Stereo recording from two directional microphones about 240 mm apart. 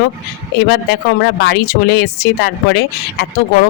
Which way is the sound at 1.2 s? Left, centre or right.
Left.